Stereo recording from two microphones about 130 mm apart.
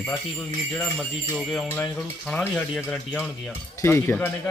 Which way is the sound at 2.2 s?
5° left (ahead or behind).